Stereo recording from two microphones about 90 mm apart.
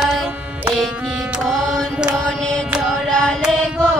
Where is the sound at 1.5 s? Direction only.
5° left (ahead or behind).